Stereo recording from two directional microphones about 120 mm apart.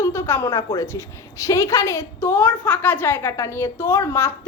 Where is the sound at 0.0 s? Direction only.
20° left (ahead or behind).